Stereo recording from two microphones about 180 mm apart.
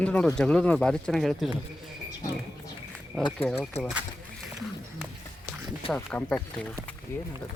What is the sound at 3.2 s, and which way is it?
Speech, 25° left (ahead or behind).